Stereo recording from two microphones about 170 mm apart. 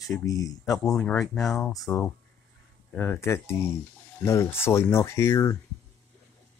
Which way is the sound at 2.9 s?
15° left (ahead or behind).